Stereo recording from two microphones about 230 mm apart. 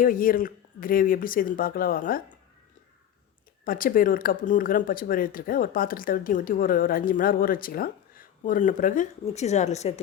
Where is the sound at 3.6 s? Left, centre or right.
Left.